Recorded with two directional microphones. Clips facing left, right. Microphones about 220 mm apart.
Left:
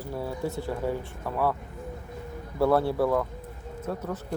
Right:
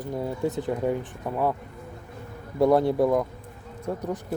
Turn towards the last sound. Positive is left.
turn(degrees=-15)  # may be behind; listen again after turning